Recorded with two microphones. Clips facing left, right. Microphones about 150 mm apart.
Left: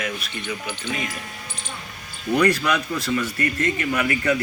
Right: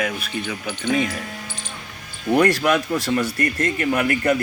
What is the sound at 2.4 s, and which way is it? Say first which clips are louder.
A man's voice: right 2 dB; 50° right (ahead or behind).